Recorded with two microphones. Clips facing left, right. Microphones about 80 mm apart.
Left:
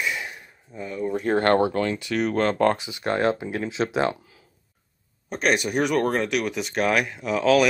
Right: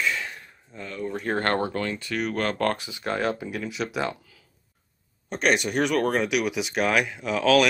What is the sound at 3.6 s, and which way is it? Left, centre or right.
Speech, left.